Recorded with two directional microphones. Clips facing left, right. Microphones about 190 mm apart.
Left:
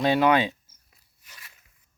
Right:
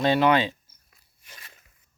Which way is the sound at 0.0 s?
10° left (ahead or behind).